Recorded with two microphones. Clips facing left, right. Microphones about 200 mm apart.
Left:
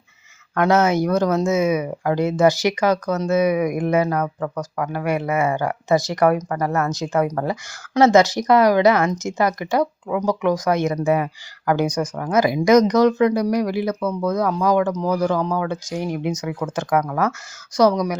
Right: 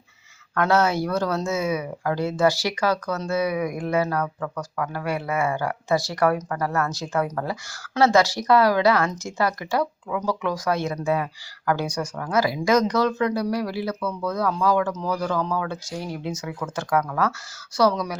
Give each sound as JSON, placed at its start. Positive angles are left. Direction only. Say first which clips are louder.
{"t": 0.5, "sound": "speech", "louder": "left 4 dB", "side_deg": 20}